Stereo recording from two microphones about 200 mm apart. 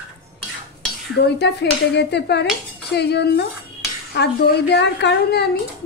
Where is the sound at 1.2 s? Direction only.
55° left (ahead or behind).